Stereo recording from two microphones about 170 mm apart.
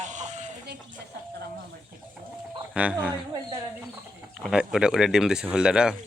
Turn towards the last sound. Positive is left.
turn(degrees=-5)  # may be behind; listen again after turning